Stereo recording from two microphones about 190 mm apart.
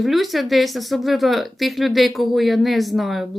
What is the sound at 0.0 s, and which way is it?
Speech, centre (ahead or behind).